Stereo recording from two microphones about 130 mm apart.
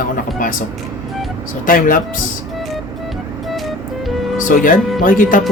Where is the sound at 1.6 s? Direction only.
90° left.